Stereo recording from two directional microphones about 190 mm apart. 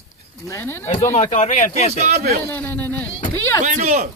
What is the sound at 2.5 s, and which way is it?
Speech, 10° left (ahead or behind).